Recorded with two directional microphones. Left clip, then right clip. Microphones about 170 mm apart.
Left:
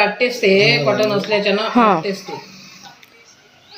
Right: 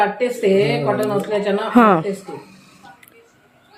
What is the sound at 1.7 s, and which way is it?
Speech, 35° right (ahead or behind).